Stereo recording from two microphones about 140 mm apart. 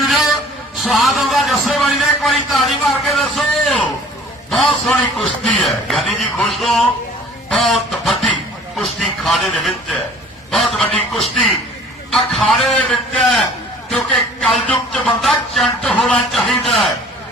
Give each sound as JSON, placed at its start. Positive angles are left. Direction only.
{"t": 0.8, "sound": "a man's voice", "side_deg": 0}
{"t": 7.5, "sound": "a sound", "side_deg": 0}
{"t": 8.7, "sound": "a man's voice", "side_deg": 0}
{"t": 12.1, "sound": "a man's voice", "side_deg": 0}